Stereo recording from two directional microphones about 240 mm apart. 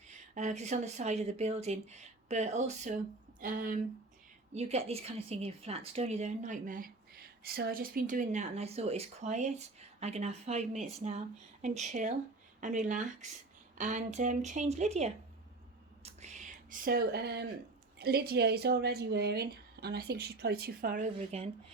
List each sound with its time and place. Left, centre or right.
0.3 s a woman's voice: right
16.0 s whispering: right
18.0 s a woman's voice: right